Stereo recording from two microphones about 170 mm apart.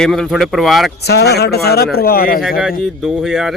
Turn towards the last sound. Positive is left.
turn(degrees=0)  # may be behind; listen again after turning